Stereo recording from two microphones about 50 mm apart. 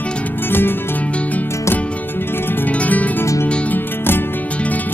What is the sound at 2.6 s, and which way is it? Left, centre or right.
Music, left.